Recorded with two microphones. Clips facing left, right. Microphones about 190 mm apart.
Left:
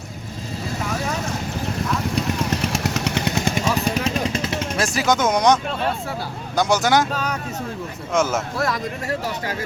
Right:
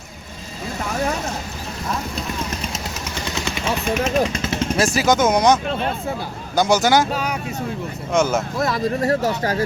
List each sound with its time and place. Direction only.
2.6 s vehicle: 75° left (ahead or behind); by 4.1 s 35° left (ahead or behind)
4.8 s speech: centre (ahead or behind)
6.6 s speech: centre (ahead or behind)
8.1 s speech: centre (ahead or behind)
8.5 s speech: 25° right (ahead or behind); by 9.6 s 40° right (ahead or behind)